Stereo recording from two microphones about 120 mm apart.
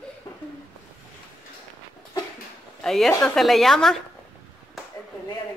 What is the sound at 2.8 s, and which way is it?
Speech, 5° left (ahead or behind).